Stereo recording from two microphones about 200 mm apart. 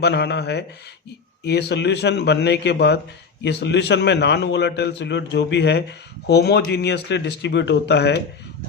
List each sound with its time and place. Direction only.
0.0 s a man's voice: 55° left (ahead or behind)